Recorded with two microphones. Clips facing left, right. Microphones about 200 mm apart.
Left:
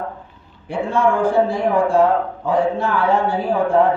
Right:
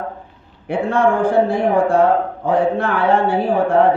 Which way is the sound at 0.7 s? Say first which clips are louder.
Right 2 dB; 60° right (ahead or behind).